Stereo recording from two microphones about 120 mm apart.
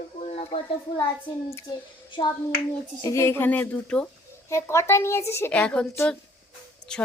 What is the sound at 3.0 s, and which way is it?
A woman's voice, 25° left (ahead or behind).